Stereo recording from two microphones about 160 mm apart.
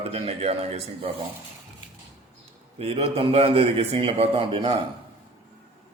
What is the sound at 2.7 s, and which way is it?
A man's voice, 35° right (ahead or behind).